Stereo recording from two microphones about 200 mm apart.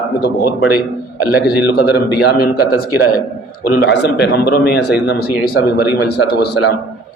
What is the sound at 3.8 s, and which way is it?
A man's voice, 55° left (ahead or behind).